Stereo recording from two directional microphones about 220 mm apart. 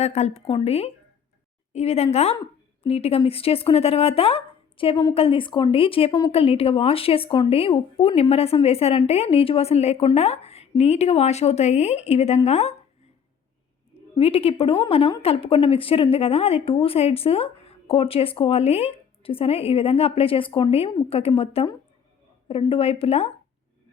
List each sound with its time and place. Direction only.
0.0 s a woman's voice: 30° left (ahead or behind)
14.2 s a woman's voice: 25° left (ahead or behind)